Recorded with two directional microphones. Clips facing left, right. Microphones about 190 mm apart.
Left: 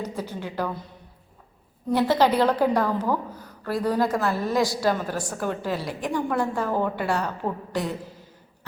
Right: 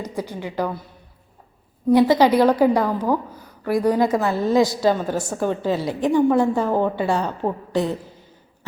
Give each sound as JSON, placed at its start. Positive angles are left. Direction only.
{"t": 0.0, "sound": "a woman's voice", "side_deg": -15}
{"t": 1.9, "sound": "a woman's voice", "side_deg": -15}